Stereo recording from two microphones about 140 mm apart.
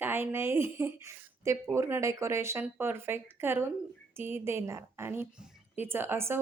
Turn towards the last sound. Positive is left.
turn(degrees=-15)  # may be behind; listen again after turning